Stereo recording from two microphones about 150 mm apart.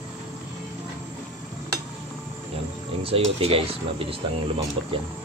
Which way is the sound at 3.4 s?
40° right (ahead or behind).